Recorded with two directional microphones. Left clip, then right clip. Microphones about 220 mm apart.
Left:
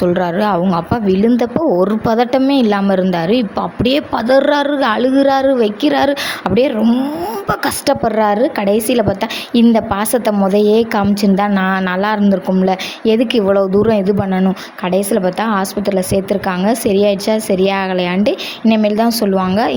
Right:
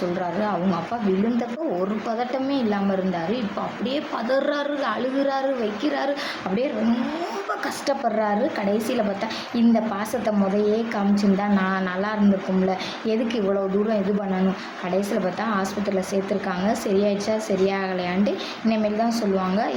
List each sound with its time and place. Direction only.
0.2 s a woman's voice: 40° left (ahead or behind)
7.6 s a woman's voice: 40° left (ahead or behind)